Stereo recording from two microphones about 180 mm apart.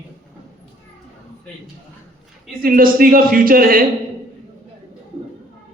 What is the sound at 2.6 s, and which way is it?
Speech, 50° right (ahead or behind).